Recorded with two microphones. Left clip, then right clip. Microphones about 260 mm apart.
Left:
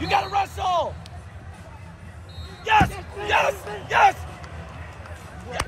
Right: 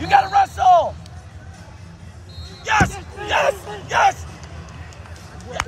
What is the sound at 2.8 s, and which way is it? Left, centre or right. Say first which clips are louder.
Speech: right 1 dB; right.